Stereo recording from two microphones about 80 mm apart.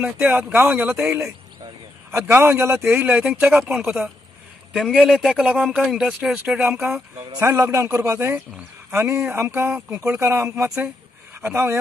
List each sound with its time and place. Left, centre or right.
0.0 s speech: centre
3.7 s speech: centre
6.3 s speech: centre
7.3 s a man's voice: right